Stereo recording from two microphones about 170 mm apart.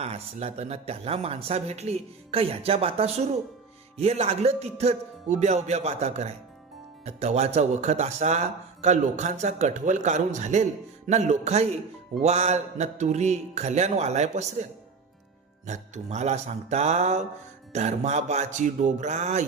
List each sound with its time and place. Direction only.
0.0 s speech: 35° right (ahead or behind)
15.6 s speech: 40° right (ahead or behind)